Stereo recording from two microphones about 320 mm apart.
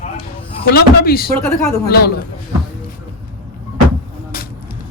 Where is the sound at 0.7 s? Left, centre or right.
Left.